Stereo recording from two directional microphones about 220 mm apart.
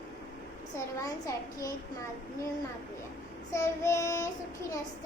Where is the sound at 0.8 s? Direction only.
15° left (ahead or behind).